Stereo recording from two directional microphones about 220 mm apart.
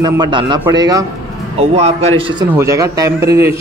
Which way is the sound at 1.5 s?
30° right (ahead or behind).